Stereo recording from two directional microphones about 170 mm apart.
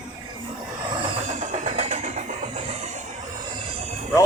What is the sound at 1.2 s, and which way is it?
Vehicle, 45° right (ahead or behind).